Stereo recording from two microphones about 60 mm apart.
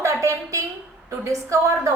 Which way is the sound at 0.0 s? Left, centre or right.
Right.